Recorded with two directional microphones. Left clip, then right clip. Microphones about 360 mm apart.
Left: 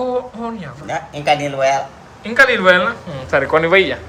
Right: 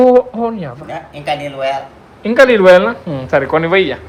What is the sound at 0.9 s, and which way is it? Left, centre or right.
Speech, left.